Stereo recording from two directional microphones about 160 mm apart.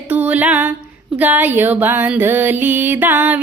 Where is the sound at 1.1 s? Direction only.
10° right (ahead or behind).